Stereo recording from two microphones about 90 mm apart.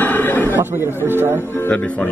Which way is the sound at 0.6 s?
25° right (ahead or behind).